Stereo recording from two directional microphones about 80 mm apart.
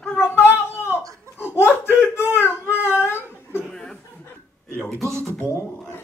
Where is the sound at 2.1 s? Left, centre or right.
Left.